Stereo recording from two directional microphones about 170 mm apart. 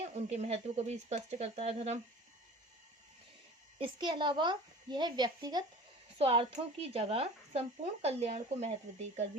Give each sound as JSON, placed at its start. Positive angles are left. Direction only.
{"t": 0.3, "sound": "speech", "side_deg": -40}
{"t": 3.8, "sound": "speech", "side_deg": -30}
{"t": 6.1, "sound": "speech", "side_deg": -35}